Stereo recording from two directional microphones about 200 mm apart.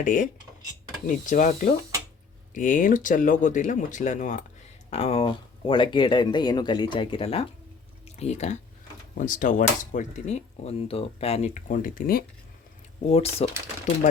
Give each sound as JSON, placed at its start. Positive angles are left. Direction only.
{"t": 0.0, "sound": "speech", "side_deg": 40}
{"t": 13.1, "sound": "speech", "side_deg": 30}